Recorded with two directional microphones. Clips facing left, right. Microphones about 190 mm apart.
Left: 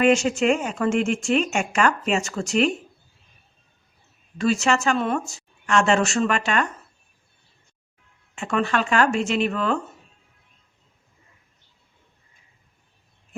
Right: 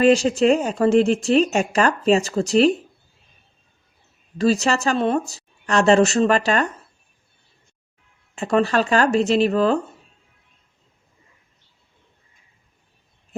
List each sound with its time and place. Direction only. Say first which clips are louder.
0.0 s speech: right 3 dB; 35° right (ahead or behind)
4.4 s speech: right 2 dB; 35° right (ahead or behind)
8.4 s speech: right 5 dB; 35° right (ahead or behind)